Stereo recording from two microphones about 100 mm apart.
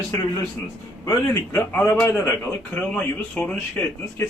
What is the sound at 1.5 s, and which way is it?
Speech, 20° left (ahead or behind).